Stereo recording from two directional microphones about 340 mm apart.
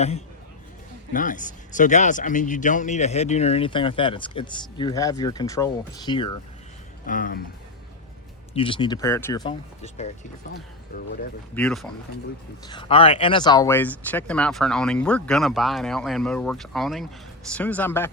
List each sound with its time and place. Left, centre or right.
1.1 s speech: left
7.0 s speech: left
8.5 s speech: centre
11.5 s speech: centre
12.6 s speech: centre